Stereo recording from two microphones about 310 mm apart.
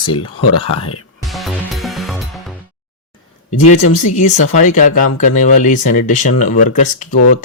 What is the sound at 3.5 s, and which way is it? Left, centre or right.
Speech, left.